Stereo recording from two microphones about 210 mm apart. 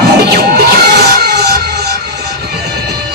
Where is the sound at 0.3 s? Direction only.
50° right (ahead or behind).